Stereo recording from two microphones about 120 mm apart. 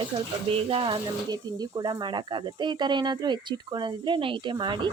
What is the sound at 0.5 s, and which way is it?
Speech, 50° right (ahead or behind).